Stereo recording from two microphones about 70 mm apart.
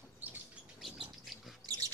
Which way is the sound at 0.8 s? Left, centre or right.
Centre.